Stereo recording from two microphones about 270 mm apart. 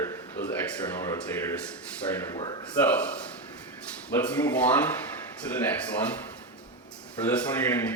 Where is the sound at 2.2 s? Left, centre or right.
Centre.